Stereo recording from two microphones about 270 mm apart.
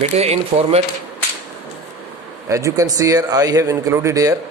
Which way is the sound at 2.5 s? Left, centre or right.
Centre.